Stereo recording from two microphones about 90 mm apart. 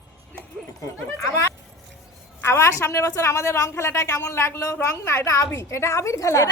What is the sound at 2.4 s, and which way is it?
A woman's voice, 30° left (ahead or behind).